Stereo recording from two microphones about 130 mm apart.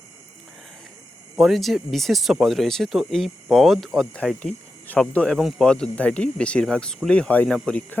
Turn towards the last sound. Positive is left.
turn(degrees=10)  # may be behind; listen again after turning